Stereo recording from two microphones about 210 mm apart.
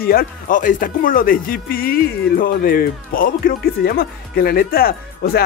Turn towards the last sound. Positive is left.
turn(degrees=45)  # may be behind; listen again after turning